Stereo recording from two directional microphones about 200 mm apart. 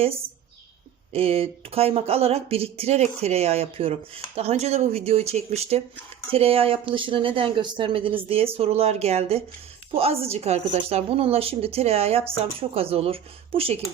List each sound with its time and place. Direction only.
1.1 s a woman's voice: 30° right (ahead or behind)